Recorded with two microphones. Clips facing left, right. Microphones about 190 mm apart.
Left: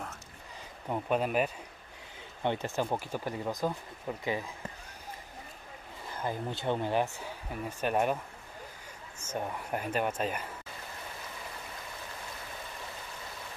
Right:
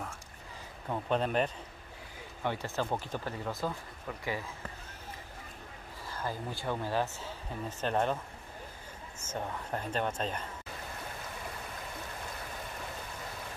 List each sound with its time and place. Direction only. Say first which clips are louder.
0.8 s speech: left 1 dB; 10° left (ahead or behind)
2.4 s speech: left 3 dB; 20° left (ahead or behind)
6.0 s speech: left 3 dB; 20° left (ahead or behind)
9.2 s speech: left 2 dB; 10° left (ahead or behind)